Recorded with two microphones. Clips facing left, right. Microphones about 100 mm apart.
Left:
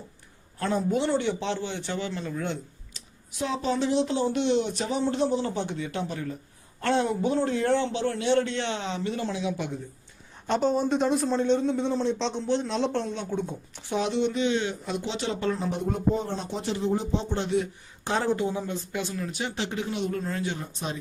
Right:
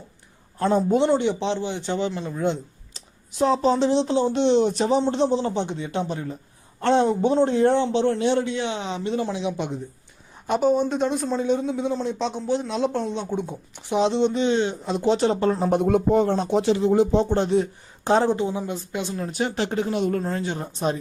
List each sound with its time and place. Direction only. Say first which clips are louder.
0.6 s a man's voice: right 6 dB; 30° right (ahead or behind)
3.3 s a man's voice: right 8 dB; 35° right (ahead or behind); by 9.8 s 20° right (ahead or behind)
10.4 s speech: right 4 dB; 10° right (ahead or behind)
13.1 s a man's voice: right 3 dB; 15° right (ahead or behind)
15.0 s speech: right 10 dB; 40° right (ahead or behind)
15.7 s speech: right 8 dB; 75° right (ahead or behind); by 17.5 s 50° right (ahead or behind)
17.5 s speech: right 5 dB; 35° right (ahead or behind)
18.3 s a man's voice: right 3 dB; 20° right (ahead or behind)
19.3 s speech: right 6 dB; 45° right (ahead or behind)